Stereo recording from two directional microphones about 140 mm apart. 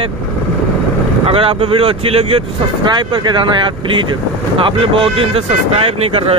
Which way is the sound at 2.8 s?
35° right (ahead or behind).